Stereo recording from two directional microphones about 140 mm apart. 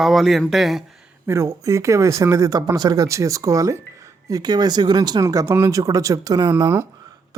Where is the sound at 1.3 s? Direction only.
20° right (ahead or behind).